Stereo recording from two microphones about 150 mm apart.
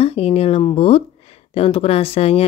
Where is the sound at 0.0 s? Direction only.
40° left (ahead or behind).